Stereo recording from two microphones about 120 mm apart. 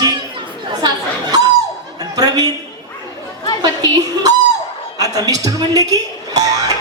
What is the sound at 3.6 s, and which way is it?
A man's voice, 30° right (ahead or behind).